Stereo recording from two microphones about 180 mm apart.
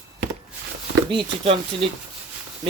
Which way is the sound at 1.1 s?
30° right (ahead or behind).